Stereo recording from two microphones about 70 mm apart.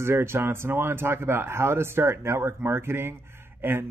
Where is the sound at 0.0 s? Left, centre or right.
Right.